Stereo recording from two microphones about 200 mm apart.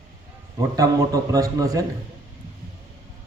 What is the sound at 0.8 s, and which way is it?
Speech, 15° right (ahead or behind).